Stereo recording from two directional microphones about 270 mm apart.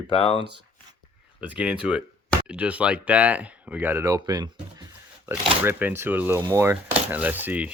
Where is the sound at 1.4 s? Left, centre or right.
Centre.